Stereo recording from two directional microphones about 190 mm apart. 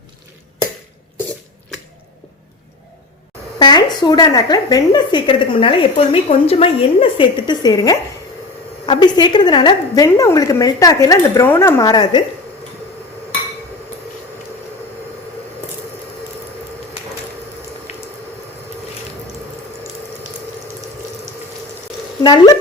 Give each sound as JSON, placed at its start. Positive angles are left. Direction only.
{"t": 3.6, "sound": "a woman's voice", "side_deg": 20}
{"t": 17.9, "sound": "a sound", "side_deg": 35}
{"t": 22.2, "sound": "speech", "side_deg": 20}